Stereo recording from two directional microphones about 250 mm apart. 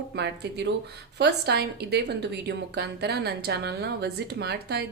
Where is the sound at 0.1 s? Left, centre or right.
Right.